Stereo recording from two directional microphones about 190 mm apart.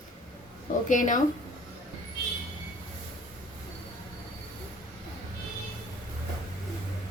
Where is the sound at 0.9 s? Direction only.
45° left (ahead or behind).